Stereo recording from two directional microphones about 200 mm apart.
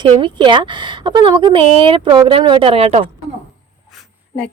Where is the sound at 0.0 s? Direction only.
25° right (ahead or behind).